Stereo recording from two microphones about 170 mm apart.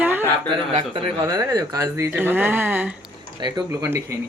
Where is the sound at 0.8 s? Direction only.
30° right (ahead or behind); by 2.9 s 10° right (ahead or behind).